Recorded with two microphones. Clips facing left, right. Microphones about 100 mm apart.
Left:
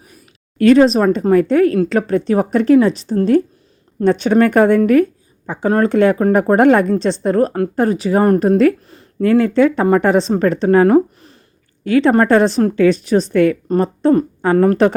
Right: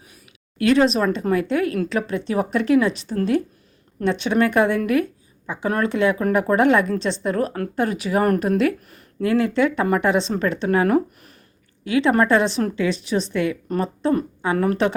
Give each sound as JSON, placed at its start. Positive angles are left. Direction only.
{"t": 0.6, "sound": "speech", "side_deg": 45}
{"t": 11.9, "sound": "a woman's voice", "side_deg": 40}
{"t": 13.7, "sound": "speech", "side_deg": 35}